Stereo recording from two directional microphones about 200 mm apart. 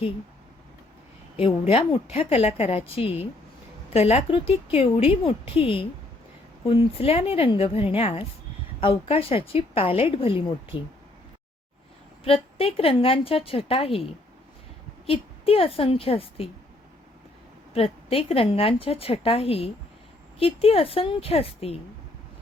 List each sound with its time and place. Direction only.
1.4 s a woman's voice: 30° left (ahead or behind)
12.2 s a woman's voice: 30° left (ahead or behind)
17.7 s a woman's voice: 30° left (ahead or behind)